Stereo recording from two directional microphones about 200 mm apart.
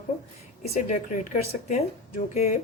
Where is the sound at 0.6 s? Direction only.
35° left (ahead or behind).